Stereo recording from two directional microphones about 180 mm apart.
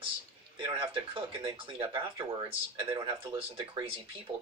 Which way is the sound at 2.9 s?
25° right (ahead or behind).